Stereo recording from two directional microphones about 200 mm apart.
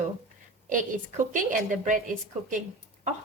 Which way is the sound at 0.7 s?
40° right (ahead or behind).